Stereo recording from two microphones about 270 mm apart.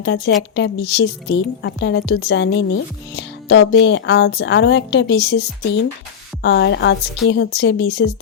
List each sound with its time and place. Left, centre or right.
0.0 s speech: left